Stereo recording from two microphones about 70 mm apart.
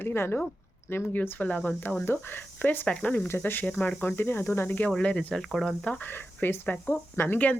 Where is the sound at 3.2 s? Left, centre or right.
Left; by 5.9 s centre.